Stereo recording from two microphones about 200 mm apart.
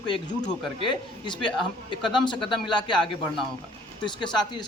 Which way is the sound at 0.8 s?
25° left (ahead or behind).